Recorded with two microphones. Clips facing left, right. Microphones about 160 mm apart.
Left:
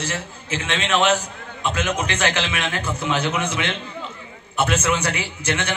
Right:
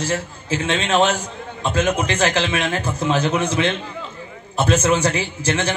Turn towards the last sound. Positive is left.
turn(degrees=-30)  # may be behind; listen again after turning